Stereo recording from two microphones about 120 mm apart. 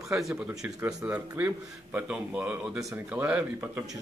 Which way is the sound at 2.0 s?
15° right (ahead or behind).